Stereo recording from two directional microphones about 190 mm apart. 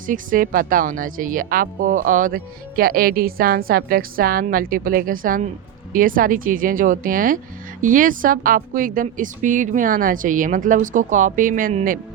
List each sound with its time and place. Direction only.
0.1 s speech: 45° right (ahead or behind)